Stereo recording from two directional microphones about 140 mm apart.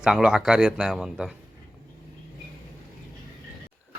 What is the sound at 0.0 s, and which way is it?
A man's voice, 5° right (ahead or behind).